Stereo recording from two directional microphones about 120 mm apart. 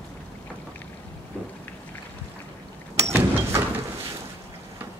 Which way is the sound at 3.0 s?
25° right (ahead or behind).